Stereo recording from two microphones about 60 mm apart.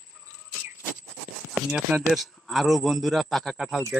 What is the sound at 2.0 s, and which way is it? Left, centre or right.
A man's voice, centre.